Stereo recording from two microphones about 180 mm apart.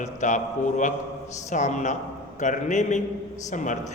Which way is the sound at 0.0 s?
40° left (ahead or behind).